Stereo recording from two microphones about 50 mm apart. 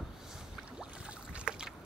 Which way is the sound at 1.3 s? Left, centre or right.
Centre.